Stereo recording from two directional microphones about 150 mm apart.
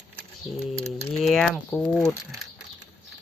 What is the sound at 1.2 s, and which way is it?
Speech, 5° left (ahead or behind).